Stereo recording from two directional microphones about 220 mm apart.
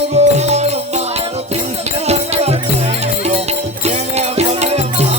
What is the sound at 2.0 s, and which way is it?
Music, 30° right (ahead or behind).